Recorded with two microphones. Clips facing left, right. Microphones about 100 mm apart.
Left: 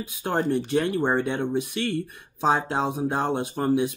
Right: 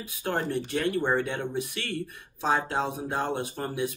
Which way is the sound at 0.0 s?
20° left (ahead or behind).